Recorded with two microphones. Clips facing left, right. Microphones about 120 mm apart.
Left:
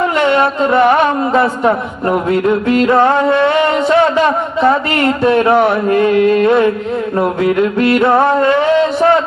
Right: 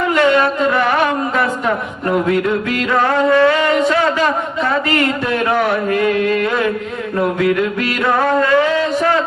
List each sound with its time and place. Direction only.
0.2 s speech: 25° left (ahead or behind)